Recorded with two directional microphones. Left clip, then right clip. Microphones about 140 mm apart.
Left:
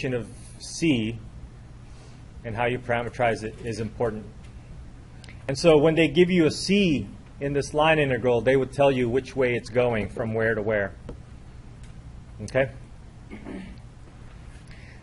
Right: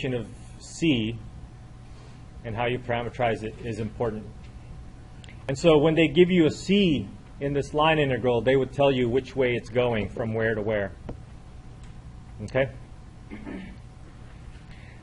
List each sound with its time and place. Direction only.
0.0 s a man's voice: 20° right (ahead or behind)
2.4 s speech: 20° right (ahead or behind)
5.6 s a man's voice: 20° right (ahead or behind)